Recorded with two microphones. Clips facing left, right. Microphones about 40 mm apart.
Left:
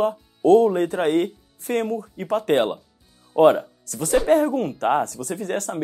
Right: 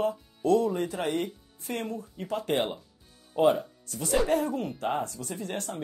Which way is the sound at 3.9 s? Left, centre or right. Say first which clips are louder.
Left 6 dB; left.